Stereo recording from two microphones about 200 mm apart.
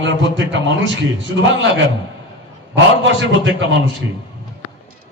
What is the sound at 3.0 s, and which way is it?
Speech, 65° right (ahead or behind).